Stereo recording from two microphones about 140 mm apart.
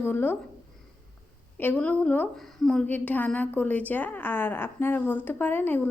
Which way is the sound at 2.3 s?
Centre (ahead or behind).